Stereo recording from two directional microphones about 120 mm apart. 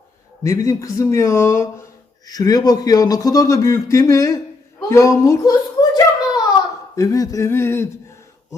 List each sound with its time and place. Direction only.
0.4 s speech: 25° left (ahead or behind)
2.2 s speech: 35° left (ahead or behind)
4.9 s a sound: 25° left (ahead or behind)
6.9 s speech: 30° left (ahead or behind)